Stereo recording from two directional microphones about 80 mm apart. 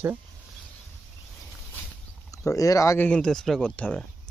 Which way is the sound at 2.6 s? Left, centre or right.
Left.